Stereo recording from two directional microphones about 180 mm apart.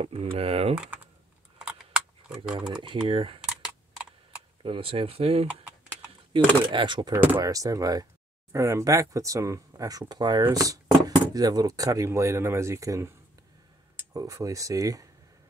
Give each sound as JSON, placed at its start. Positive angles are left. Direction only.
{"t": 0.0, "sound": "speech", "side_deg": -35}
{"t": 0.7, "sound": "speech", "side_deg": -10}
{"t": 1.6, "sound": "typing", "side_deg": -5}
{"t": 2.7, "sound": "speech", "side_deg": -25}
{"t": 3.3, "sound": "computer keyboard", "side_deg": -5}
{"t": 4.6, "sound": "speech", "side_deg": -30}
{"t": 5.5, "sound": "typing", "side_deg": -10}
{"t": 6.3, "sound": "speech", "side_deg": -25}
{"t": 14.1, "sound": "speech", "side_deg": -20}